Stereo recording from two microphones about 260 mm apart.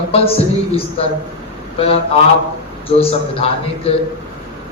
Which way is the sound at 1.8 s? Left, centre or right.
Left.